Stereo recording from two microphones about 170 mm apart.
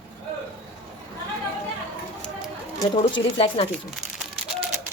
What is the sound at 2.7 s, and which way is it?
Speech, 25° left (ahead or behind).